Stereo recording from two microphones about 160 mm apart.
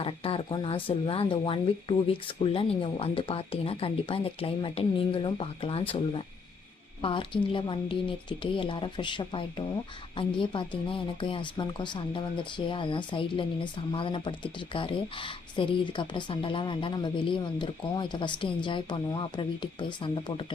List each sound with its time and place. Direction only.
0.0 s speech: 35° left (ahead or behind)